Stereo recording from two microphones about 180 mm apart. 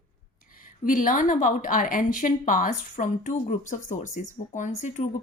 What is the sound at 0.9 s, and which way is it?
A woman's voice, 45° left (ahead or behind).